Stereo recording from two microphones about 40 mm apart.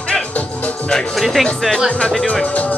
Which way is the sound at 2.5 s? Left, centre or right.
Left.